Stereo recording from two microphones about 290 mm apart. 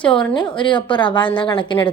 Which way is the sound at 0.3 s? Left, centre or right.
Centre.